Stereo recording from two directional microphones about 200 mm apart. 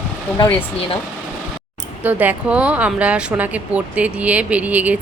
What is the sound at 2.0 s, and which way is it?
Speech, 10° right (ahead or behind).